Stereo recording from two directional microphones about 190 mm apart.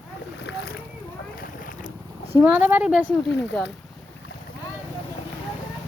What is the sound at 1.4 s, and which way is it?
Boat, 45° left (ahead or behind).